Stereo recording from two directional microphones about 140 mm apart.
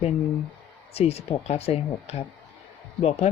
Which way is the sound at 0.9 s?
45° left (ahead or behind).